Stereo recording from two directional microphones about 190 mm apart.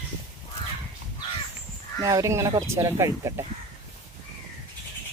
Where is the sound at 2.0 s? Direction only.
15° right (ahead or behind).